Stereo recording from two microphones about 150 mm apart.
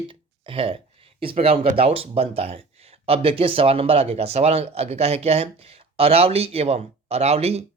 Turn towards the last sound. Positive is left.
turn(degrees=-45)  # may be behind; listen again after turning